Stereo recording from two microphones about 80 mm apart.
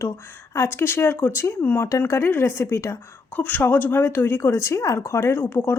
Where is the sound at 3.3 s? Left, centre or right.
Left.